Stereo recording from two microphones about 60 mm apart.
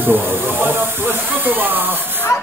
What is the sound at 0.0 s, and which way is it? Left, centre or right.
Hiss, right.